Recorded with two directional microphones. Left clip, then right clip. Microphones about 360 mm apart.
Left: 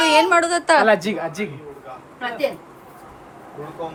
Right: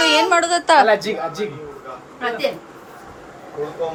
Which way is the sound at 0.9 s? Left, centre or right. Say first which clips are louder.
Even; left.